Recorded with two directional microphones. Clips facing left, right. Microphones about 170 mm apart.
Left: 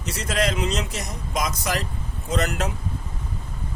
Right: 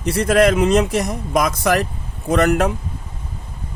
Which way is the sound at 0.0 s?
60° right (ahead or behind).